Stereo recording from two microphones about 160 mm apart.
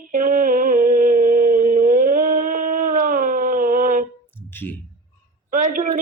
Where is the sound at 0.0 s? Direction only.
55° right (ahead or behind).